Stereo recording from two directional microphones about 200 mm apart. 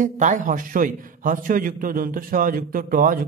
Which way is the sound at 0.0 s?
40° right (ahead or behind).